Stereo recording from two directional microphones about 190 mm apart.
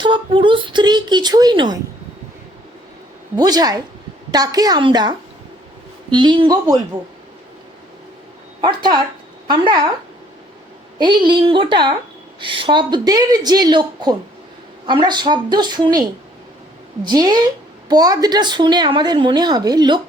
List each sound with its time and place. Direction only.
0.0 s a woman's voice: 25° right (ahead or behind)
3.3 s a woman's voice: 20° right (ahead or behind)
8.6 s a woman's voice: 25° right (ahead or behind)
10.9 s a woman's voice: 25° right (ahead or behind)
17.1 s a woman's voice: 20° right (ahead or behind)